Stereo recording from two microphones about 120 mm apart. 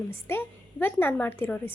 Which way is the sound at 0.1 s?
20° left (ahead or behind).